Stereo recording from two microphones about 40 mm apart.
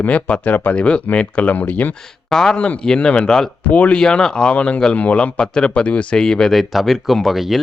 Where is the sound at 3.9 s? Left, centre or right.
Left.